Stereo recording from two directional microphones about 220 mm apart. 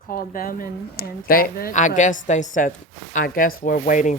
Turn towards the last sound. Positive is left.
turn(degrees=35)  # may be behind; listen again after turning